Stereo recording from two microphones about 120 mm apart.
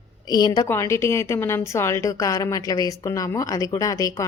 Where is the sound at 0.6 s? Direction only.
20° left (ahead or behind).